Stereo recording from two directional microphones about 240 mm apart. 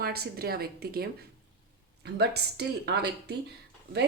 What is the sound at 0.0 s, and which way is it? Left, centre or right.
Speech, right.